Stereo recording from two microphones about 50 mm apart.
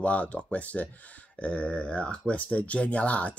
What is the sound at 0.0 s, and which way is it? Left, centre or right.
Speech, left.